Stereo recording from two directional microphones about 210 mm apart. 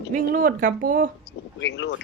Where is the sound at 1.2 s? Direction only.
55° left (ahead or behind).